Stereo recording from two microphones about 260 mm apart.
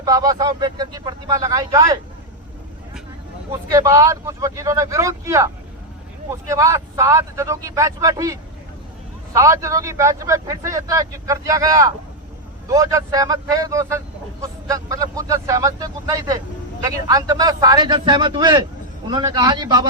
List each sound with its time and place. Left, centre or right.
0.0 s speech: centre
3.7 s speech: centre
6.5 s speech: centre